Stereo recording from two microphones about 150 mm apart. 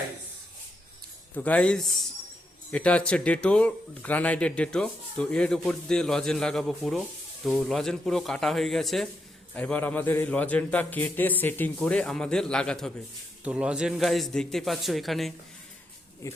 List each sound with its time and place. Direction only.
1.3 s a man's voice: 10° left (ahead or behind)
13.4 s a man's voice: 5° right (ahead or behind)
16.2 s speech: 20° left (ahead or behind)